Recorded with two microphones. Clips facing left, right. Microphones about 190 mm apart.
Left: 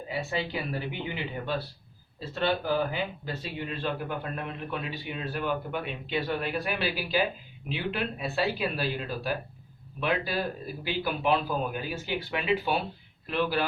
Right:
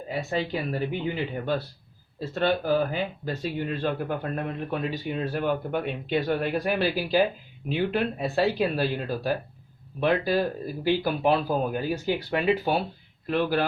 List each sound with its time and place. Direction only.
0.1 s speech: 45° right (ahead or behind)